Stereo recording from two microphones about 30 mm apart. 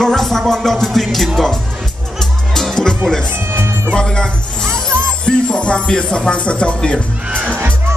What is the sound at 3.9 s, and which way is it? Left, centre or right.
Music, left.